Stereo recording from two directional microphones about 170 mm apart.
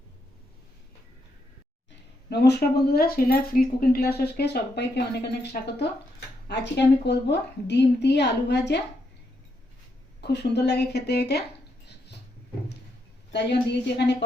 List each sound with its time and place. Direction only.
2.3 s a woman's voice: 75° left (ahead or behind); by 8.8 s 90° left
10.2 s speech: 80° left
13.3 s a woman's voice: 85° left